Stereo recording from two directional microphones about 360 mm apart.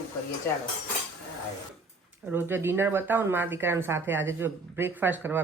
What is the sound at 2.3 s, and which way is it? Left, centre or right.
Speech, centre.